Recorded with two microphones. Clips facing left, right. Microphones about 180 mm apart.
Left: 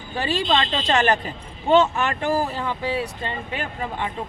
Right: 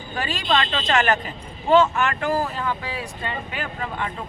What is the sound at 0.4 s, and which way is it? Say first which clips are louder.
Speech: right 2 dB; 25° left (ahead or behind).